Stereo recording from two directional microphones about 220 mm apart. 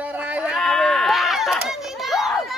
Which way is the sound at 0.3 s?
5° right (ahead or behind).